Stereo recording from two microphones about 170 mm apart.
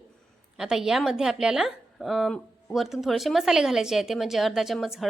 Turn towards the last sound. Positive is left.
turn(degrees=0)  # may be behind; listen again after turning